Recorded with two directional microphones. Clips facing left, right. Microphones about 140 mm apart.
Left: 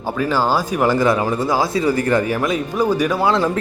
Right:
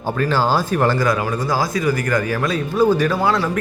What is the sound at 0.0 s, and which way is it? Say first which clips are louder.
Speech: even; 10° left (ahead or behind).